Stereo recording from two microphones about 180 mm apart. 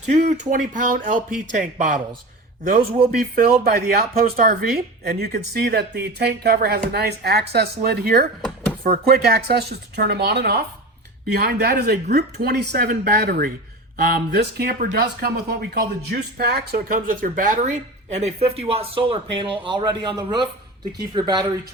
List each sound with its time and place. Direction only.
0.0 s speech: 40° right (ahead or behind)
3.2 s speech: 55° right (ahead or behind); by 21.7 s 20° right (ahead or behind)